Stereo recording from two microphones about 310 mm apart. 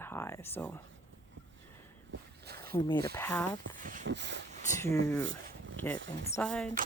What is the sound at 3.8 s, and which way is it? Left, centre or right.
Speech, right.